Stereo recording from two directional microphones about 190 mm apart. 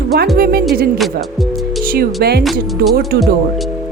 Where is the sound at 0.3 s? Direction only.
50° right (ahead or behind).